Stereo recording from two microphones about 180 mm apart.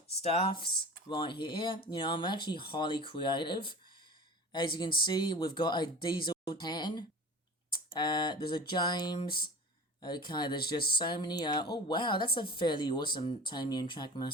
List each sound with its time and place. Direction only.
0.2 s speech: 30° left (ahead or behind)